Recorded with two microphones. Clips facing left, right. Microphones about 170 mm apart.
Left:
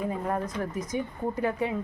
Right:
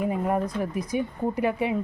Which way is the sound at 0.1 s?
15° right (ahead or behind).